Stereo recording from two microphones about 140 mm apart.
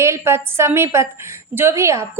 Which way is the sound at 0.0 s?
20° right (ahead or behind).